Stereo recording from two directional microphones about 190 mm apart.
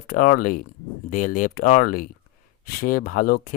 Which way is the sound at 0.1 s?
45° left (ahead or behind).